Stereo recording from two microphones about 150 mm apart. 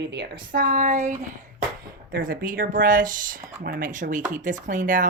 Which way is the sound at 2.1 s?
70° right (ahead or behind).